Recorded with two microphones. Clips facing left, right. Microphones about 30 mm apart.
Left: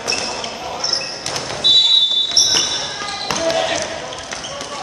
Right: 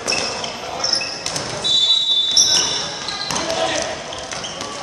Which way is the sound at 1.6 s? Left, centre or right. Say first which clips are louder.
Left 6 dB; left.